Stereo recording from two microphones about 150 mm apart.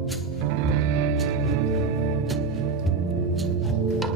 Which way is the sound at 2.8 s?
Centre (ahead or behind).